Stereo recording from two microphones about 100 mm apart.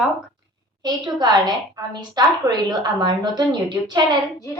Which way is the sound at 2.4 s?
45° right (ahead or behind).